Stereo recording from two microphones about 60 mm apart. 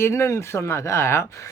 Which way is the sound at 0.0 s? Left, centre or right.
Left.